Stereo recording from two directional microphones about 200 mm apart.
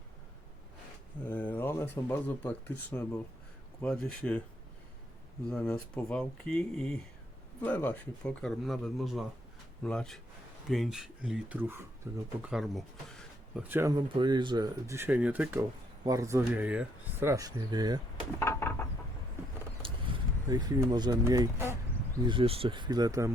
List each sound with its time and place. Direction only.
1.2 s speech: 10° left (ahead or behind)
5.5 s speech: 5° left (ahead or behind); by 18.0 s 20° right (ahead or behind)
18.3 s a sound: 10° left (ahead or behind)
19.8 s speech: 25° right (ahead or behind)
22.3 s speech: 25° right (ahead or behind)